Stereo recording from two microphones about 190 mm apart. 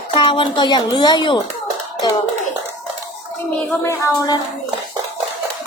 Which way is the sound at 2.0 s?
20° left (ahead or behind).